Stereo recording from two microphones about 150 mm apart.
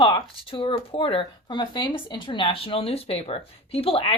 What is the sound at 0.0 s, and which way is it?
Speech, 35° left (ahead or behind).